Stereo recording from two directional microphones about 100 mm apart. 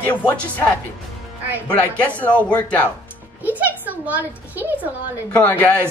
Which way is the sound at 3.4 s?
15° right (ahead or behind).